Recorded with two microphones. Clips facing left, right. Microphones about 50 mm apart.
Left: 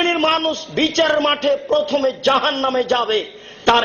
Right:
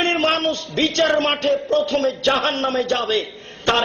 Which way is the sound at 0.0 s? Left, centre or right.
Left.